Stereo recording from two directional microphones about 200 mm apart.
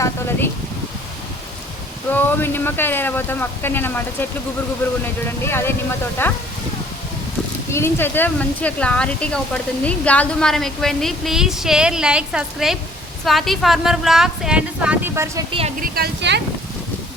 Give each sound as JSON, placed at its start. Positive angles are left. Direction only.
{"t": 0.0, "sound": "a sound", "side_deg": 10}
{"t": 2.1, "sound": "speech", "side_deg": 10}
{"t": 7.7, "sound": "speech", "side_deg": 10}
{"t": 15.8, "sound": "speech", "side_deg": -55}